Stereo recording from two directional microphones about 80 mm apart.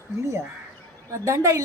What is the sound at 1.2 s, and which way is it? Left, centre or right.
Speech, right.